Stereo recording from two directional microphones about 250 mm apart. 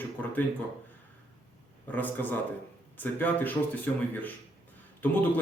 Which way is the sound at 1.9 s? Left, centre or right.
Centre.